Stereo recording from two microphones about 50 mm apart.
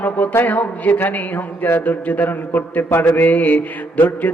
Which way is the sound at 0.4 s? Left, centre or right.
Left.